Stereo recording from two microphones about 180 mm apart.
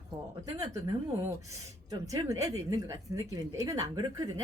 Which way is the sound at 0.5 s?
20° right (ahead or behind).